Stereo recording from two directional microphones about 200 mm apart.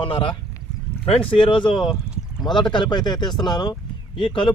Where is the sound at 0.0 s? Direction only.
25° left (ahead or behind).